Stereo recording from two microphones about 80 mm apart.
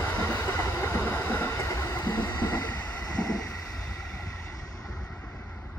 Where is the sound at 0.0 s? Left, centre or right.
Left.